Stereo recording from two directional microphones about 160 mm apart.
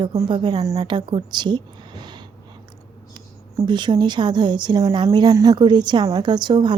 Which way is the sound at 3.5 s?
30° right (ahead or behind).